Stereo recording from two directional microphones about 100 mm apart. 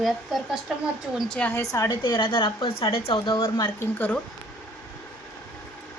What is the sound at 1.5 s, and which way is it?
Speech, 35° left (ahead or behind).